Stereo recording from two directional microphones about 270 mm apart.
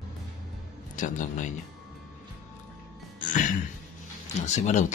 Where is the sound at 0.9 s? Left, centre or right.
Left.